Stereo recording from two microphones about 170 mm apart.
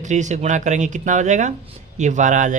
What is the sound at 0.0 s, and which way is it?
A man's voice, 45° right (ahead or behind).